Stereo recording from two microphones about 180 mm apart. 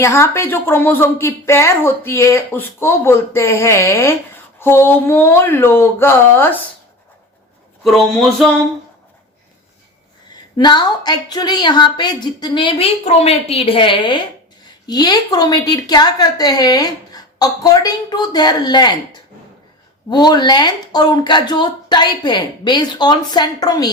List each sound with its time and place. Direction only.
0.0 s a woman's voice: 15° left (ahead or behind)
7.9 s a sound: centre (ahead or behind)
10.6 s a woman's voice: 25° left (ahead or behind)
20.1 s a woman's voice: 25° left (ahead or behind)